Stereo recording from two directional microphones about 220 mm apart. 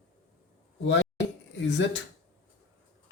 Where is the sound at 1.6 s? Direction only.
55° left (ahead or behind).